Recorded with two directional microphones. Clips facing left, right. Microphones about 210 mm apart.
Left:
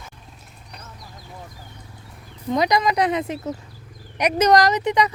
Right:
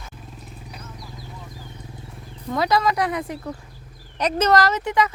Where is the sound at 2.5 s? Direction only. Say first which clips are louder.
Left 1 dB; 15° left (ahead or behind).